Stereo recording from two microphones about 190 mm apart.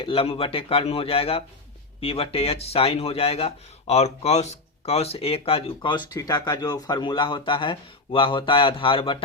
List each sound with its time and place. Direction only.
0.0 s speech: 30° left (ahead or behind)